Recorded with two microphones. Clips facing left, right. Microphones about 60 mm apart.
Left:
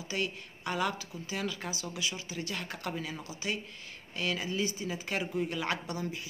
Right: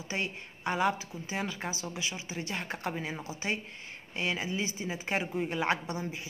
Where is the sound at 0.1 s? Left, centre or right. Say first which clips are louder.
Even; right.